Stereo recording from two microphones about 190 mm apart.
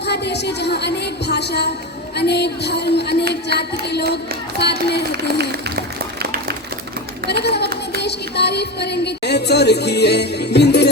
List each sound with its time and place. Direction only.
0.0 s music: 60° left (ahead or behind)
5.1 s a sound: 60° right (ahead or behind)
7.4 s speech: 60° left (ahead or behind)
8.0 s music: 60° left (ahead or behind)